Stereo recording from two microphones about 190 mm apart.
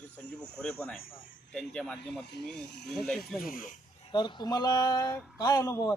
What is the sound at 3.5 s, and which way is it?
Speech, 45° left (ahead or behind).